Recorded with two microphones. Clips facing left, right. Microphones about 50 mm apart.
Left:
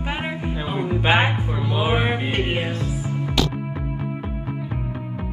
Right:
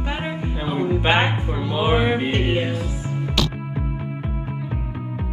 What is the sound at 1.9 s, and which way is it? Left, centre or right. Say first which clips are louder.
Speech: right 4 dB; left.